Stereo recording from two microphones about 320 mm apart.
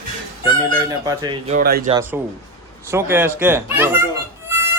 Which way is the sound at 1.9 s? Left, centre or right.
Centre.